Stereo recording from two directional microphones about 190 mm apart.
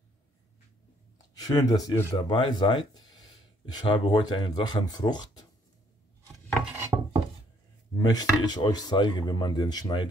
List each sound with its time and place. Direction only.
1.1 s speech: 20° left (ahead or behind)
6.8 s wood: 20° right (ahead or behind)
8.0 s speech: 20° left (ahead or behind)